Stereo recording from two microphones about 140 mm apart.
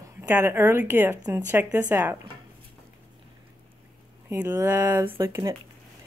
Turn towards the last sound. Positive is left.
turn(degrees=-20)  # may be behind; listen again after turning